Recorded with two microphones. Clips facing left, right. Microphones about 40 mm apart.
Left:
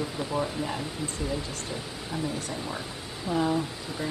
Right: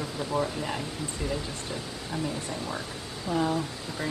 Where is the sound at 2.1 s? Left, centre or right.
Centre.